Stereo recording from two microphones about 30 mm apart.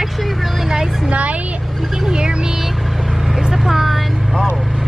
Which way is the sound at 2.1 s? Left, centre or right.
Right.